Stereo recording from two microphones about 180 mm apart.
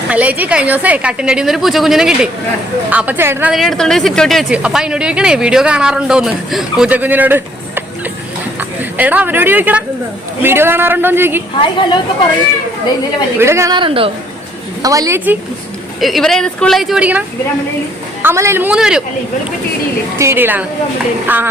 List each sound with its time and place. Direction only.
0.1 s a man's voice: 10° right (ahead or behind)
3.5 s speech: centre (ahead or behind)
9.0 s a man's voice: 10° right (ahead or behind)
11.6 s a woman's voice: 25° left (ahead or behind)
13.4 s a woman's voice: 15° right (ahead or behind)
14.8 s a man's voice: 20° right (ahead or behind)
16.0 s a man's voice: centre (ahead or behind)
20.1 s a man's voice: 15° right (ahead or behind)